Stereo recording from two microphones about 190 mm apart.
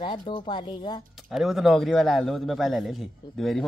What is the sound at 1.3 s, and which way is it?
A man's voice, centre (ahead or behind).